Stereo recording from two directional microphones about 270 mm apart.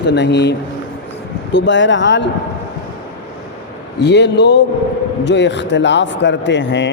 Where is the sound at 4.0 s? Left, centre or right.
Left.